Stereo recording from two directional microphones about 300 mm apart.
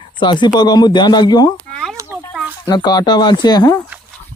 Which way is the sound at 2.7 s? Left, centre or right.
Centre.